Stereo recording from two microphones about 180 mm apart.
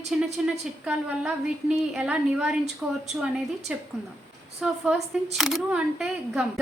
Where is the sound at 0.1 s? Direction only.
5° right (ahead or behind).